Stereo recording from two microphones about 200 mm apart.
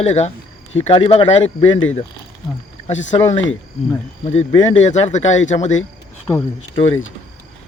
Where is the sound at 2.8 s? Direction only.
35° left (ahead or behind).